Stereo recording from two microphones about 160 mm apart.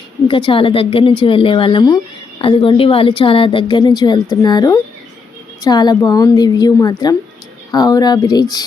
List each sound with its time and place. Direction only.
0.3 s a woman's voice: 30° left (ahead or behind)